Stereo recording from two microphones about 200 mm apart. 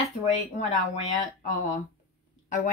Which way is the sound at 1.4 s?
40° left (ahead or behind).